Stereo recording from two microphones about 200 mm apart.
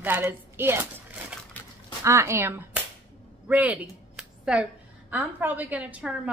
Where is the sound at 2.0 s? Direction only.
15° right (ahead or behind).